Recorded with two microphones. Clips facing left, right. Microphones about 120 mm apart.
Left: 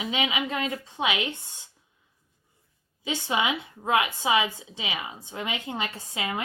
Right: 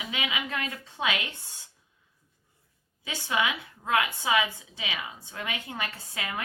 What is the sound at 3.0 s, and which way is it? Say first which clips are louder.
A woman's voice: left 2 dB; 20° left (ahead or behind).